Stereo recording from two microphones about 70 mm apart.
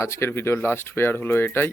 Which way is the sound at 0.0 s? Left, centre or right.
Left.